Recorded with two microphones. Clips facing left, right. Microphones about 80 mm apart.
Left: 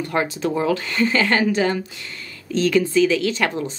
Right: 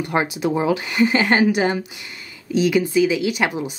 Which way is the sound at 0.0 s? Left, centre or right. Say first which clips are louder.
Right 1 dB; centre.